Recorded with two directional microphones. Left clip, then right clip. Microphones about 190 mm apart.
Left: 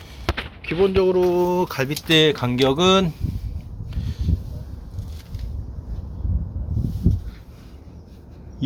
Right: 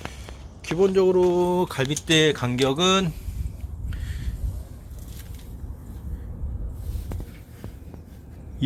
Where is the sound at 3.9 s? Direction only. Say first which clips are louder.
Left 4 dB; 10° left (ahead or behind).